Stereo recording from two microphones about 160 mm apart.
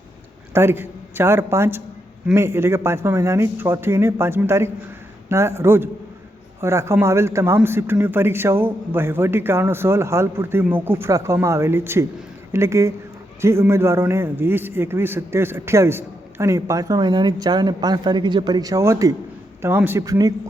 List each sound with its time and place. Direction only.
0.5 s a man's voice: 15° right (ahead or behind)